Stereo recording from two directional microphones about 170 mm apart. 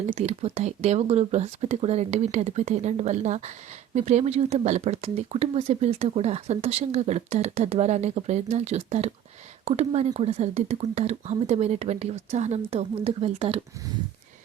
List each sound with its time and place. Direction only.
0.1 s speech: 40° right (ahead or behind)